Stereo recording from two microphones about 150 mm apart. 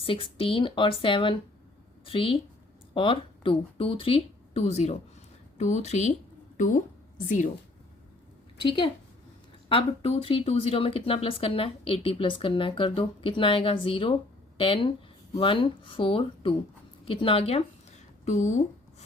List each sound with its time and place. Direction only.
0.0 s speech: 35° left (ahead or behind)
7.3 s a woman's voice: 55° left (ahead or behind)
8.6 s speech: 35° left (ahead or behind)
18.3 s writing: 55° left (ahead or behind)